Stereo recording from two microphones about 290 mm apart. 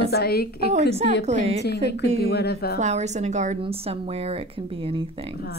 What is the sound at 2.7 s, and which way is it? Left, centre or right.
A woman's voice, right.